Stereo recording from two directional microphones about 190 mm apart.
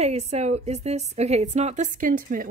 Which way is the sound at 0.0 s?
35° right (ahead or behind).